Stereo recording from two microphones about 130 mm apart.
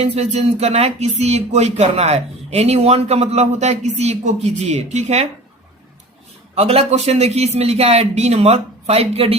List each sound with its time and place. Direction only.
0.0 s speech: 55° right (ahead or behind)
6.6 s a man's voice: 50° right (ahead or behind)